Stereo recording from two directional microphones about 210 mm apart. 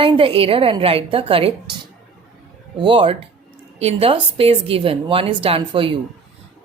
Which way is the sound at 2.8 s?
25° right (ahead or behind).